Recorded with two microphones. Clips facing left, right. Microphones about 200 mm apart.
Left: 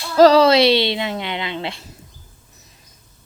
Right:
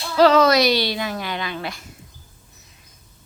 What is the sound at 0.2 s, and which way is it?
Speech, 35° left (ahead or behind).